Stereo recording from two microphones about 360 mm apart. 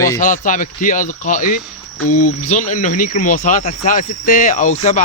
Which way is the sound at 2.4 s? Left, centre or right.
Left.